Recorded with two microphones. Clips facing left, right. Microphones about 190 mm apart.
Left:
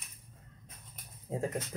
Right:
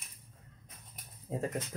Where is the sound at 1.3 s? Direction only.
5° right (ahead or behind).